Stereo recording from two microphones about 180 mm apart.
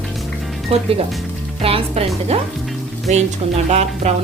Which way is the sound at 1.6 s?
30° right (ahead or behind).